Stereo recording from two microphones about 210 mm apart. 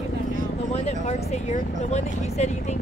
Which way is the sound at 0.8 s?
30° left (ahead or behind).